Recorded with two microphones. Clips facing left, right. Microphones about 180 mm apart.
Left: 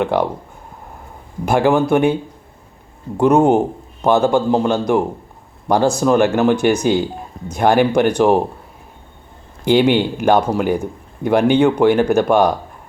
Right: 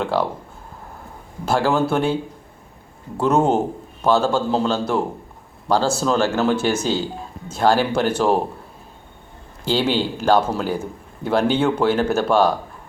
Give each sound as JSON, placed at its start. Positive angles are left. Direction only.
{"t": 0.0, "sound": "speech", "side_deg": 20}
{"t": 1.5, "sound": "speech", "side_deg": 15}
{"t": 3.2, "sound": "speech", "side_deg": 15}
{"t": 9.6, "sound": "speech", "side_deg": 15}